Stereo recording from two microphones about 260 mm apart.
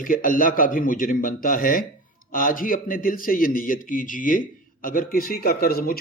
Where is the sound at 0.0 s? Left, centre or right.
Left.